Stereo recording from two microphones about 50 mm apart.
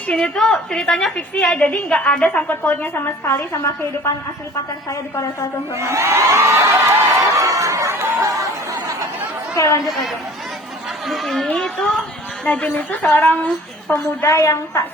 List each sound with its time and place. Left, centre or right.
0.3 s a woman's voice: centre
1.5 s a woman's voice: left
2.5 s a woman's voice: left
3.2 s a woman's voice: left
5.7 s crowd: right
9.6 s a woman's voice: left
9.8 s speech: centre
11.5 s a woman's voice: centre
12.5 s a woman's voice: left
12.7 s a woman's voice: left
14.3 s a woman's voice: left